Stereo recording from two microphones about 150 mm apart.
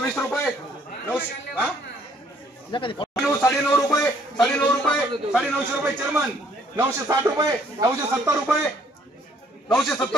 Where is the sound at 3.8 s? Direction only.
5° left (ahead or behind).